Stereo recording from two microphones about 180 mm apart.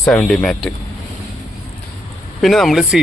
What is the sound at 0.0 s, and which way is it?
Speech, 5° left (ahead or behind).